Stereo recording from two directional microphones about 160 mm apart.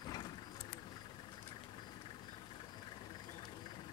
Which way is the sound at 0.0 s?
25° left (ahead or behind).